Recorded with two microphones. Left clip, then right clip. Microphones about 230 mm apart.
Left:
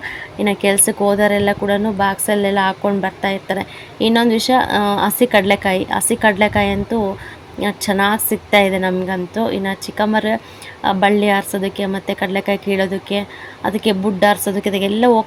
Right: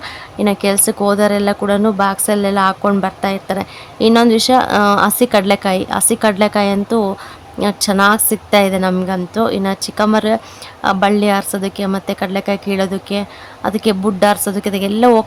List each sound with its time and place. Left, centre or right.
0.0 s speech: centre